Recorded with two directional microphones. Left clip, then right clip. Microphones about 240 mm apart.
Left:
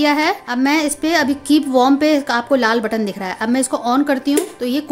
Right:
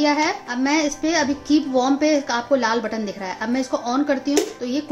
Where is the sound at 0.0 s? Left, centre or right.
Left.